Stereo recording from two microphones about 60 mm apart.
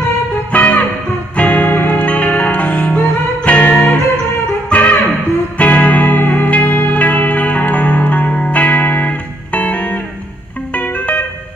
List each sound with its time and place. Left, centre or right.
0.5 s music: left